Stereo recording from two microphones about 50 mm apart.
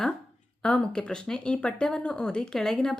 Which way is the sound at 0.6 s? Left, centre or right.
Centre.